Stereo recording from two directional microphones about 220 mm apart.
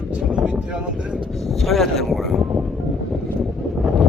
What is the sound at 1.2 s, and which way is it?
Speech, centre (ahead or behind).